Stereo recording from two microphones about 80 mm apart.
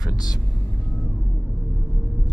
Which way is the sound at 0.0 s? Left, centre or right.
Left.